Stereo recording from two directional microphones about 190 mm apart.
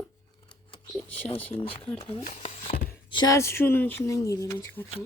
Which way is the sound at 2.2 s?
40° left (ahead or behind).